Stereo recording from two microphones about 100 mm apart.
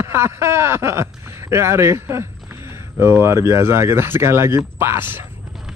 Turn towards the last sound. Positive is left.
turn(degrees=-20)  # may be behind; listen again after turning